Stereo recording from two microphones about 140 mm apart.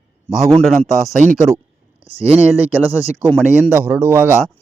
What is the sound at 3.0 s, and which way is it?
Speech, 15° right (ahead or behind).